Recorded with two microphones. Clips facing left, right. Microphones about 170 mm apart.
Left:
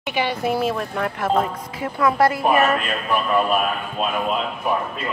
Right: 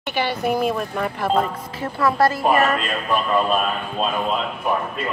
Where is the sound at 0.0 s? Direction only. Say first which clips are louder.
Even; centre (ahead or behind).